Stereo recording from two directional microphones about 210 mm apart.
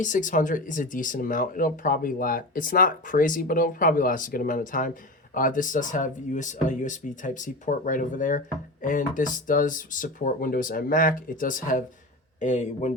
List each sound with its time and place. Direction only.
0.0 s speech: 35° left (ahead or behind)